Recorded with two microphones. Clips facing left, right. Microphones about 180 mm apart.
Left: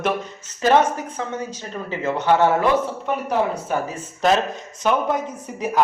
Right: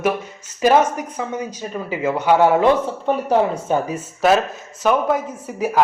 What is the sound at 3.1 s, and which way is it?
Speech, 35° right (ahead or behind).